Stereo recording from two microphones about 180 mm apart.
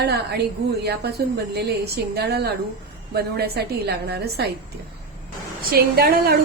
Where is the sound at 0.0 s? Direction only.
65° right (ahead or behind).